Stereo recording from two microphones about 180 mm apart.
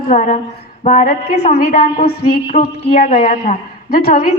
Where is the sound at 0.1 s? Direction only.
40° left (ahead or behind).